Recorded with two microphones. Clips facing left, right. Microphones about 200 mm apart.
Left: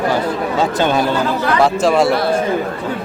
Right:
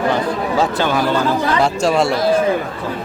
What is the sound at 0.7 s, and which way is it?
Speech, 20° left (ahead or behind).